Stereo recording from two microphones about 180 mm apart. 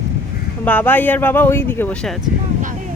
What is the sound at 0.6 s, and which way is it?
Speech, 10° left (ahead or behind).